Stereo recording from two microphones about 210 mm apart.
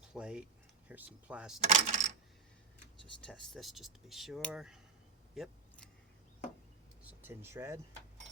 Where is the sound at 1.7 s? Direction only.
30° right (ahead or behind).